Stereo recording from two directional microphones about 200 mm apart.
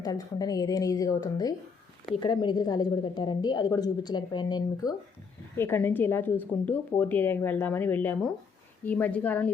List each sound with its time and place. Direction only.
0.0 s a woman's voice: 20° left (ahead or behind)